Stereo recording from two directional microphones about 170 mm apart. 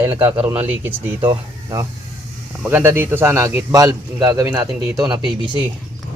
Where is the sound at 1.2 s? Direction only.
25° right (ahead or behind).